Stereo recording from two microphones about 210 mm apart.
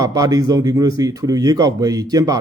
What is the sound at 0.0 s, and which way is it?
A man's voice, 15° right (ahead or behind).